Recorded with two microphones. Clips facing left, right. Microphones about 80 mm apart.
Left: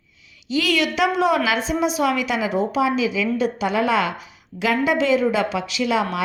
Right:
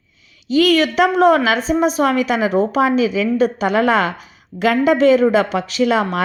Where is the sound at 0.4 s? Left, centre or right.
Right.